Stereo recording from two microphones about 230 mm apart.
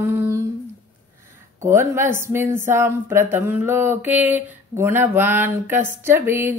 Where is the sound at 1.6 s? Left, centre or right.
Centre.